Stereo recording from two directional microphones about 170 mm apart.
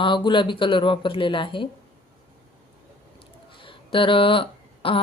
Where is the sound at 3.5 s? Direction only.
30° left (ahead or behind).